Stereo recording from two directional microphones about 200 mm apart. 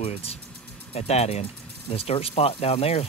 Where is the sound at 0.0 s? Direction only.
30° left (ahead or behind).